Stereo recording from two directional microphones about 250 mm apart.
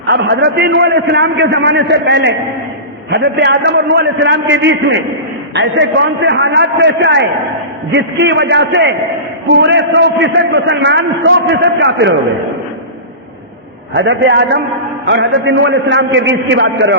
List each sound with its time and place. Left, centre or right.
0.1 s a man's voice: right
13.9 s a man's voice: right